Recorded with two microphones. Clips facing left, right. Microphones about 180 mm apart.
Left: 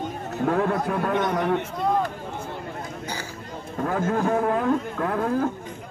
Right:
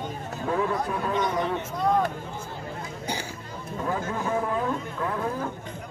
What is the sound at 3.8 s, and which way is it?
Speech, 55° left (ahead or behind).